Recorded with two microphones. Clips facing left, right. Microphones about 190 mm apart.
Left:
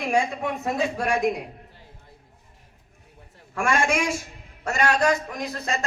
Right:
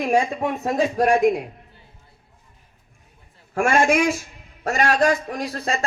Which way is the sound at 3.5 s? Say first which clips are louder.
Right 5 dB; 50° right (ahead or behind).